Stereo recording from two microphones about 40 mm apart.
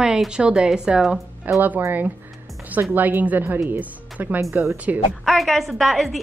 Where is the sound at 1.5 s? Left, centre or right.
Right.